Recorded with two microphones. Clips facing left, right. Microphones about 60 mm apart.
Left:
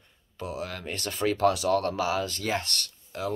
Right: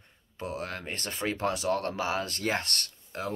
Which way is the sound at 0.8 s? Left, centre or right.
Right.